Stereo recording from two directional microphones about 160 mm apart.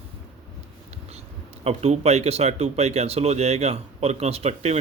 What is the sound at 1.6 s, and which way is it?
Speech, 40° right (ahead or behind).